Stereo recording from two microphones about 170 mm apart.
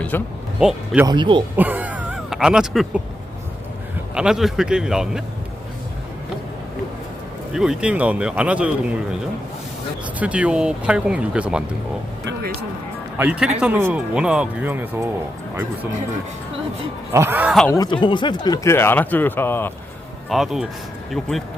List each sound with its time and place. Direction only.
0.1 s speech: 10° left (ahead or behind)
0.6 s a man's voice: 5° right (ahead or behind)
1.0 s speech: 25° right (ahead or behind)
1.5 s a sound: 10° right (ahead or behind)
4.1 s a man's voice: 5° right (ahead or behind)
7.5 s speech: 5° right (ahead or behind)
10.2 s speech: 10° right (ahead or behind)
13.1 s speech: 5° right (ahead or behind)
17.1 s speech: 15° right (ahead or behind)
17.7 s speech: 25° left (ahead or behind)
20.3 s a man's voice: centre (ahead or behind)